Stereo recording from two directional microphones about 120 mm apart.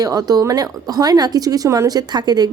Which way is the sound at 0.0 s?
30° right (ahead or behind).